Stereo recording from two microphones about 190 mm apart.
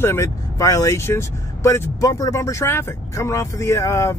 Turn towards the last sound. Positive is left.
turn(degrees=15)  # may be behind; listen again after turning